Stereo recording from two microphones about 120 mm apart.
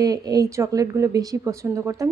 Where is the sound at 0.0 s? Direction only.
30° right (ahead or behind).